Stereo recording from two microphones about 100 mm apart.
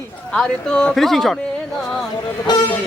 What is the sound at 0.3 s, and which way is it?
Speech, 10° left (ahead or behind).